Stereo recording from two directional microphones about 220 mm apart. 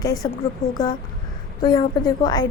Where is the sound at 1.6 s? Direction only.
20° left (ahead or behind).